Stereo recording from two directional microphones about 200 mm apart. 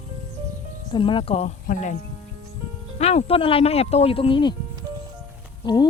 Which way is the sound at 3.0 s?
30° left (ahead or behind).